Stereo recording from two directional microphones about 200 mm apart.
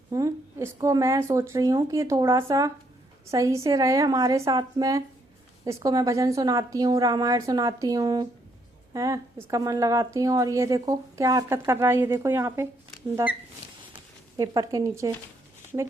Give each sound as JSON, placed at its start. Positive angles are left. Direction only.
{"t": 0.1, "sound": "speech", "side_deg": -15}
{"t": 14.3, "sound": "speech", "side_deg": -20}